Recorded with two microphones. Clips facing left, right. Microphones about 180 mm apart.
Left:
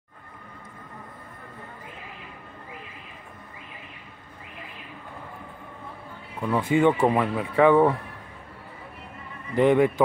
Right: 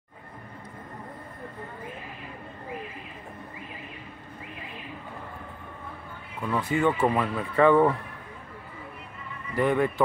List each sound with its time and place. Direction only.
6.4 s speech: 20° left (ahead or behind)
9.6 s speech: 20° left (ahead or behind)